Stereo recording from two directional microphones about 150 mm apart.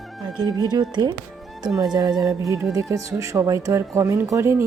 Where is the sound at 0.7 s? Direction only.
30° right (ahead or behind).